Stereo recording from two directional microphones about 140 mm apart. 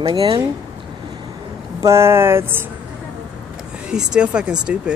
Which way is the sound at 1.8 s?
20° right (ahead or behind).